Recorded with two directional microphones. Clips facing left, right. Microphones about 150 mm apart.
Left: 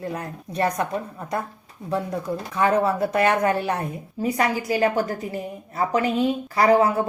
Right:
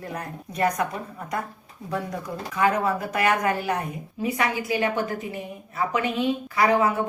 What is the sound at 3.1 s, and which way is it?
A woman's voice, 30° left (ahead or behind).